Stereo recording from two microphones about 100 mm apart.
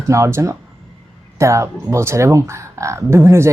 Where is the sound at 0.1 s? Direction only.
30° right (ahead or behind).